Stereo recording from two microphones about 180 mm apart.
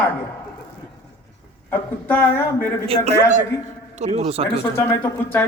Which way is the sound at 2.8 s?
35° right (ahead or behind).